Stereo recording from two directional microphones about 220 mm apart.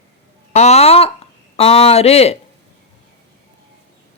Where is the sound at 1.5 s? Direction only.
30° left (ahead or behind).